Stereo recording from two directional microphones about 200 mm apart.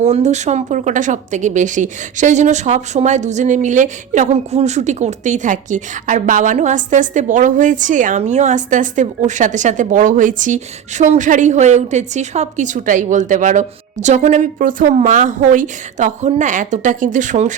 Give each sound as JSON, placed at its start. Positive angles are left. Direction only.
{"t": 0.0, "sound": "speech", "side_deg": -35}